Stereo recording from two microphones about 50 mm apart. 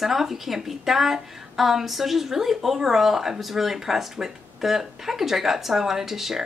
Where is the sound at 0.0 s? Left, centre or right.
Centre.